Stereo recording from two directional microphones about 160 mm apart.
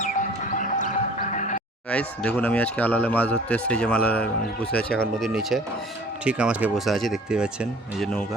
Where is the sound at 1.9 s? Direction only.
5° left (ahead or behind).